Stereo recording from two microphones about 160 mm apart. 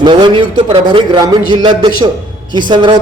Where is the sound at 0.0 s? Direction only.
30° right (ahead or behind).